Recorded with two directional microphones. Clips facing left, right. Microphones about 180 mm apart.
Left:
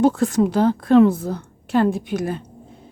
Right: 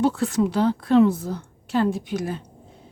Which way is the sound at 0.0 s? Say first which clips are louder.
Left 4 dB; 45° left (ahead or behind).